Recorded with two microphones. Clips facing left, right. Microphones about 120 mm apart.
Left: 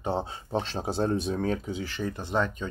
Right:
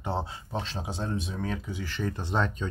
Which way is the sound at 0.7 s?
35° left (ahead or behind).